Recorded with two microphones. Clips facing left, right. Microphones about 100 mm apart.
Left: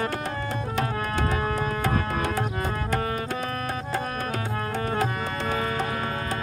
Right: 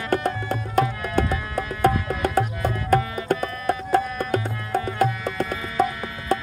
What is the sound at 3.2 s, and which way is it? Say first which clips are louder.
Tabla: right 6 dB; 55° right (ahead or behind).